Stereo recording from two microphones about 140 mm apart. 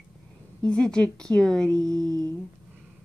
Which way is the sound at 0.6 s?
5° left (ahead or behind).